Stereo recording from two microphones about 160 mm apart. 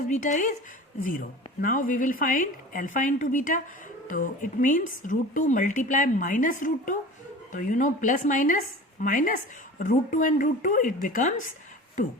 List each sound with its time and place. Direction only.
0.1 s speech: 50° left (ahead or behind)
1.6 s a woman's voice: 55° left (ahead or behind)